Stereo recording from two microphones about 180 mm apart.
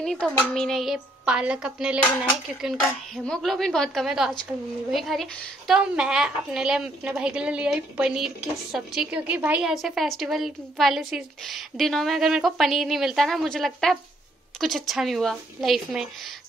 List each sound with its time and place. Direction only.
0.0 s a woman's voice: 5° left (ahead or behind)
3.3 s a woman's voice: centre (ahead or behind)